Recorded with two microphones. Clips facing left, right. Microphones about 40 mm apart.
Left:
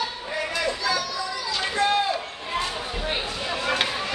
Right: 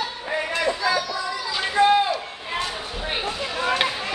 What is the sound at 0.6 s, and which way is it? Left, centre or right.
Chatter, centre.